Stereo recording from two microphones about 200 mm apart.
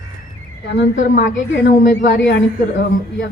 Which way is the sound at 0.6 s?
60° left (ahead or behind).